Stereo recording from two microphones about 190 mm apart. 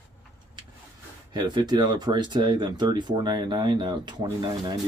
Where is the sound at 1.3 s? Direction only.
25° right (ahead or behind).